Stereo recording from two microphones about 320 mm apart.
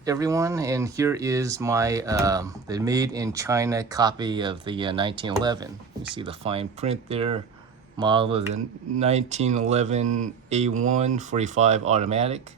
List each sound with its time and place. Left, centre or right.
0.0 s speech: centre